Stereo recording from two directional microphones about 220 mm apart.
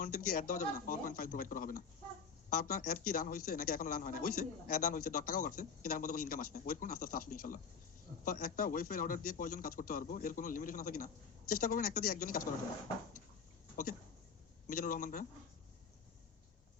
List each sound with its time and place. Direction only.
0.0 s a man's voice: 40° left (ahead or behind)
14.7 s a man's voice: 40° left (ahead or behind)